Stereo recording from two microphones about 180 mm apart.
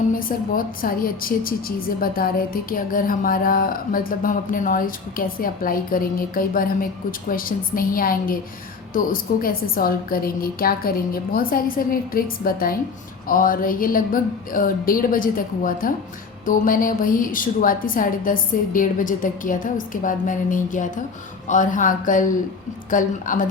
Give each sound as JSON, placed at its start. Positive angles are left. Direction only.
{"t": 0.1, "sound": "a woman's voice", "side_deg": 50}